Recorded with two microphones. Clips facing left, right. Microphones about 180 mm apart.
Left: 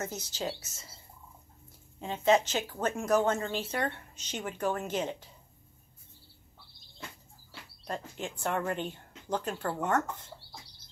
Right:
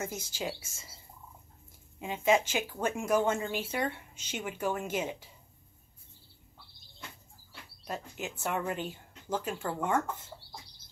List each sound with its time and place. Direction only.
0.0 s speech: 10° right (ahead or behind)
2.0 s speech: 10° right (ahead or behind)
7.8 s speech: 5° right (ahead or behind)